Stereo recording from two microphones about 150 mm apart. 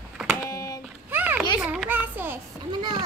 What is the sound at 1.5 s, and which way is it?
Speech, 10° right (ahead or behind).